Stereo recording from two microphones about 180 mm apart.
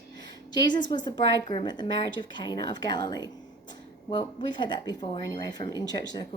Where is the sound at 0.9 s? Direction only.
25° left (ahead or behind).